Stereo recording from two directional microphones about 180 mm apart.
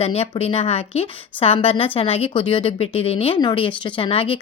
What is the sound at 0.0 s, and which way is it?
A woman's voice, 35° left (ahead or behind).